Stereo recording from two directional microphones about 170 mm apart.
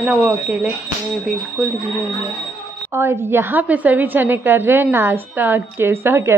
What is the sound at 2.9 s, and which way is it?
A woman's voice, 15° right (ahead or behind).